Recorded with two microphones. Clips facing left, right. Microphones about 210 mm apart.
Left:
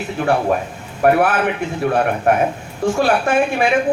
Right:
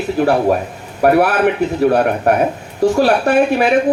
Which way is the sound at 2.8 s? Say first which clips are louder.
Right 4 dB; 40° right (ahead or behind).